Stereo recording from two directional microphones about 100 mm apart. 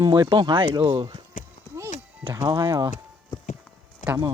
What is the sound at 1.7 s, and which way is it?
Music, 25° right (ahead or behind).